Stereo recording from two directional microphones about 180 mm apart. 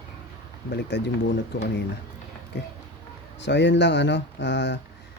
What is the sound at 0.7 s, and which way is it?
Speech, 70° left (ahead or behind).